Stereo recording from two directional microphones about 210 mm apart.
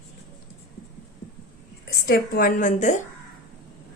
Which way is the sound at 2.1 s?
45° left (ahead or behind).